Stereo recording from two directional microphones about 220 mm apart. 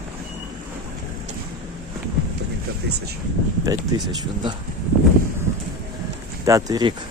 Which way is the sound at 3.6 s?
15° right (ahead or behind).